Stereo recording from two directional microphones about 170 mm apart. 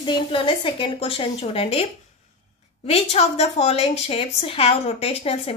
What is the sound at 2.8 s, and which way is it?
A woman's voice, 35° left (ahead or behind).